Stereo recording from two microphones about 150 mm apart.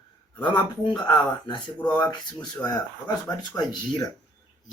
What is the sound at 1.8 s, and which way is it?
Speech, 10° left (ahead or behind).